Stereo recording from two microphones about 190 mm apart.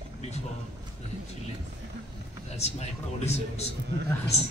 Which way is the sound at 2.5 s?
35° left (ahead or behind).